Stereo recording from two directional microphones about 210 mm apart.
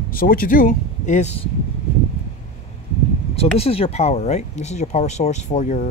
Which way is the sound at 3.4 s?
30° left (ahead or behind).